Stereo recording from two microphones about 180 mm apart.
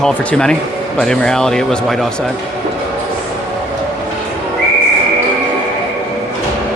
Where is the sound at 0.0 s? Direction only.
5° left (ahead or behind).